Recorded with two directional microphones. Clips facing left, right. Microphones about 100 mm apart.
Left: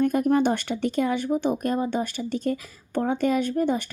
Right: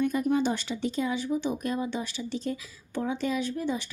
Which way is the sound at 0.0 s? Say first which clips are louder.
Left 5 dB; 50° left (ahead or behind).